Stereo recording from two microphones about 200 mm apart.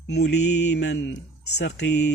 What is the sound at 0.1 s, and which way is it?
Speech, 55° left (ahead or behind).